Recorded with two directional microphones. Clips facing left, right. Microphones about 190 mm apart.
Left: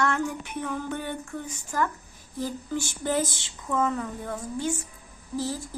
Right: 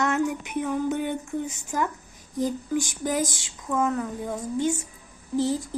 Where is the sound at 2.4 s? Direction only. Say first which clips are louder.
Right 5 dB; 15° right (ahead or behind).